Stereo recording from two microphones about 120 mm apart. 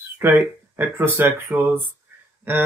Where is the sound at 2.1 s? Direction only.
15° right (ahead or behind).